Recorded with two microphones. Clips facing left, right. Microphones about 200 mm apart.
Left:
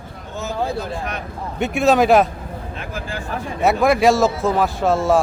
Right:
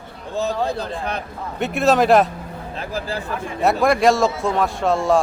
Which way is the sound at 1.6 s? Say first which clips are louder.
Left 1 dB; centre (ahead or behind).